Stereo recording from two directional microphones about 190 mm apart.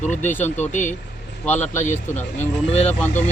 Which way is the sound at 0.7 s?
40° left (ahead or behind).